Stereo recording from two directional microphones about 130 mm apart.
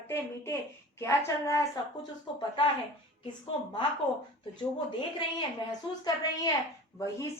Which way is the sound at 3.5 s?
45° left (ahead or behind).